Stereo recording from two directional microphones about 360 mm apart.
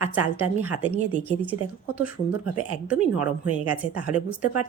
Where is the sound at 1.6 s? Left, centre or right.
Right.